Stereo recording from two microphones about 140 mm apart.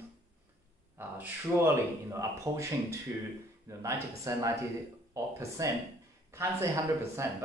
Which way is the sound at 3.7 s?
20° right (ahead or behind).